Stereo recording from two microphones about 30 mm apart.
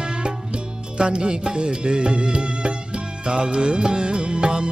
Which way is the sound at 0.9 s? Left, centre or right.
Right.